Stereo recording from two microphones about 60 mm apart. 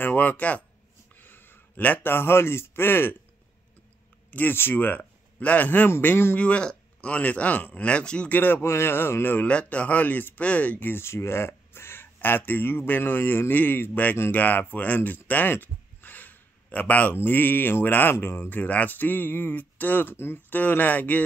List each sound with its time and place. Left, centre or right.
0.0 s speech: left
1.1 s a sound: left
2.1 s speech: left
4.3 s speech: left
5.9 s speech: left
6.3 s speech: centre
8.5 s speech: left
9.5 s speech: left